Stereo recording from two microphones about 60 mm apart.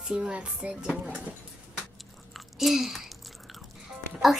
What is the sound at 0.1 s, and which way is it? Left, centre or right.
Speech, centre.